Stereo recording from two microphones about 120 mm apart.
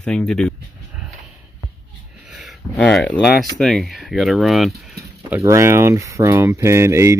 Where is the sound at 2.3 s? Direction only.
Centre (ahead or behind).